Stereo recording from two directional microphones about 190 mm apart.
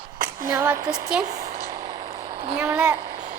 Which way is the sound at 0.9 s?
5° right (ahead or behind).